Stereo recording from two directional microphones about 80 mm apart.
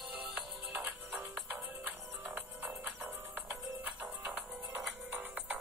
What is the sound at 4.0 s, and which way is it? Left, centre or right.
Music, centre.